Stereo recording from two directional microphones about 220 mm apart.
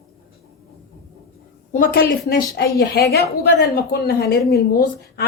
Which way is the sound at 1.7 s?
40° left (ahead or behind).